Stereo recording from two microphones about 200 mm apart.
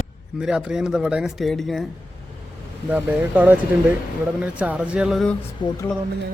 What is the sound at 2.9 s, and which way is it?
Speech, 10° right (ahead or behind).